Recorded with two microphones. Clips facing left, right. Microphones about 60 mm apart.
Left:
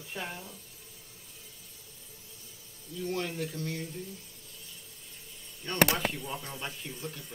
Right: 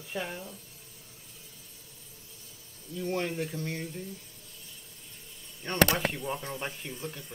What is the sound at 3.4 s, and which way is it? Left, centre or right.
Speech, right.